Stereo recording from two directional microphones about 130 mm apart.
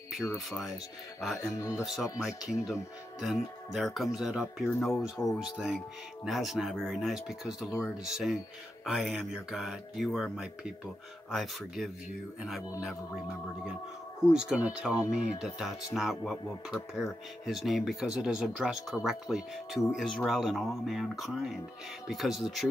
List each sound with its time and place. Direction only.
0.5 s speech: centre (ahead or behind)
1.6 s speech: 20° left (ahead or behind)
2.6 s speech: centre (ahead or behind)
14.3 s speech: 5° right (ahead or behind)